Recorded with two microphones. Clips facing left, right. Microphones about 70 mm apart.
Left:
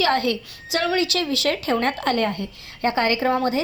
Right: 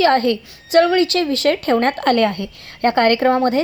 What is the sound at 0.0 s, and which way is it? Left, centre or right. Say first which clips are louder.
A woman's voice: right 6 dB; right.